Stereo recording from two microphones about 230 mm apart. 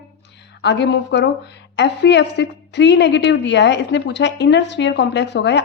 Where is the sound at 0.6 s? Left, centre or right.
Left.